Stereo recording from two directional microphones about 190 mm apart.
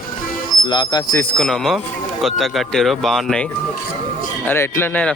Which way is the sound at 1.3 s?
Centre (ahead or behind).